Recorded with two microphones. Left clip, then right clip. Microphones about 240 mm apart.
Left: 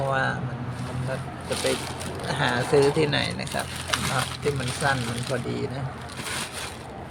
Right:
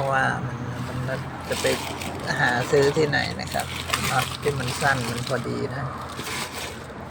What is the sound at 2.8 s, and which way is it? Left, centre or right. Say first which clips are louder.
Speech: right 1 dB; centre.